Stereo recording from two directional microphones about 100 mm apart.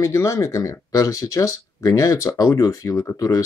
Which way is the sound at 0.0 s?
30° left (ahead or behind).